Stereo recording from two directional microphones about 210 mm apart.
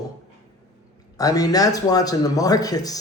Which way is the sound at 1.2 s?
15° left (ahead or behind).